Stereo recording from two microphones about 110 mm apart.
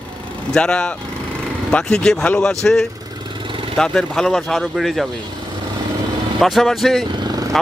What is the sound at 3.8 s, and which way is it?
A man's voice, 5° left (ahead or behind).